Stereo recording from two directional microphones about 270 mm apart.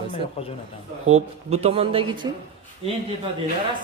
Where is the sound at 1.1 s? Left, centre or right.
Right.